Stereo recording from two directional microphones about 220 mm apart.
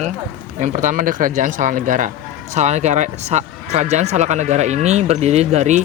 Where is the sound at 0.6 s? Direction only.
35° right (ahead or behind).